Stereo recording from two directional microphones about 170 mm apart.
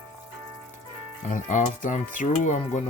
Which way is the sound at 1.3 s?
50° left (ahead or behind).